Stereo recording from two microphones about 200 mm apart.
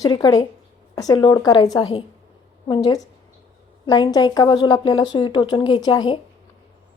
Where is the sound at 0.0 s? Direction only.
20° left (ahead or behind).